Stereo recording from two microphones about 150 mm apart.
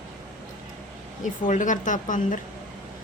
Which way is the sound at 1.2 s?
55° left (ahead or behind).